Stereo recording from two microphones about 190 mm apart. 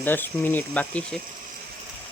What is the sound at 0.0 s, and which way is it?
Speech, 10° left (ahead or behind).